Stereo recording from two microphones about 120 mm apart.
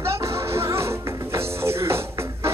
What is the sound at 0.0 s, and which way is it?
Music, 20° right (ahead or behind).